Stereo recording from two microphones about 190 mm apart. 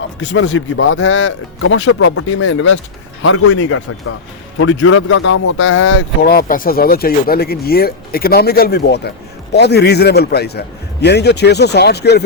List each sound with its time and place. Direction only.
0.2 s speech: 80° left
6.2 s speech: 50° left (ahead or behind)